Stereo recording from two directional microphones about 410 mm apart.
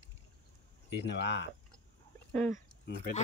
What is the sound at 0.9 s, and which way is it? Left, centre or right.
Speech, left.